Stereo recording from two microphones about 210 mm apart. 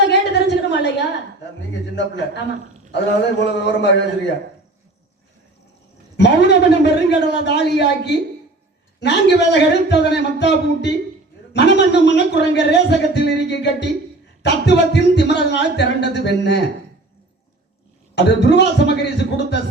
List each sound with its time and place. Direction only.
0.1 s a sound: 55° left (ahead or behind)
2.0 s speech: 55° left (ahead or behind)
3.4 s speech: 55° left (ahead or behind)
6.1 s a man's voice: 55° left (ahead or behind)
18.1 s a man's voice: 55° left (ahead or behind)